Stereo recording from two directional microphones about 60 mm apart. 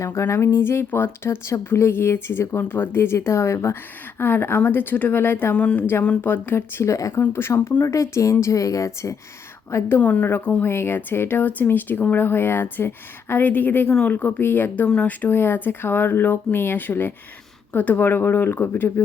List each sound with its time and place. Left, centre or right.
0.0 s a woman's voice: left
0.6 s speech: left
2.6 s speech: left
4.2 s speech: left
6.8 s a woman's voice: left
7.2 s speech: left
7.9 s a woman's voice: left
10.0 s speech: left
10.6 s speech: left
14.8 s speech: left